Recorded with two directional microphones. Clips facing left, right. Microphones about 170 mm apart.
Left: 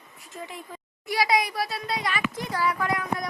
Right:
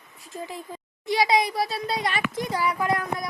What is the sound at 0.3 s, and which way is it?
A child's voice, 30° right (ahead or behind).